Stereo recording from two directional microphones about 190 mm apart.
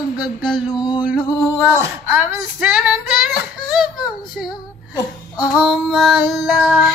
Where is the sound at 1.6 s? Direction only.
10° right (ahead or behind).